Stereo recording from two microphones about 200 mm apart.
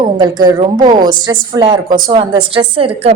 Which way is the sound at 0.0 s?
20° right (ahead or behind).